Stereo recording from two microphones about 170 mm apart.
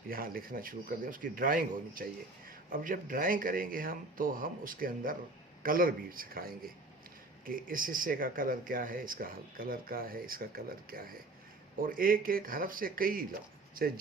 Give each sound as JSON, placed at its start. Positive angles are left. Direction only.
{"t": 0.1, "sound": "speech", "side_deg": -60}